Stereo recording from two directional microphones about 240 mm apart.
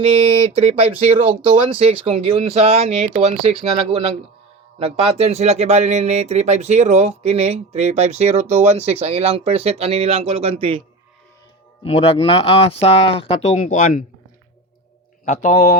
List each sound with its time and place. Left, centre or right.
0.0 s speech: right
11.8 s speech: left
15.2 s speech: left